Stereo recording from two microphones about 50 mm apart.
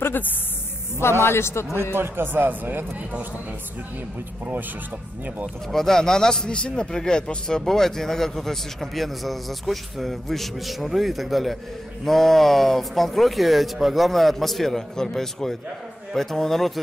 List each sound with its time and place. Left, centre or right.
0.0 s speech: left
1.2 s a man's voice: left
2.0 s speech: right
5.7 s a man's voice: centre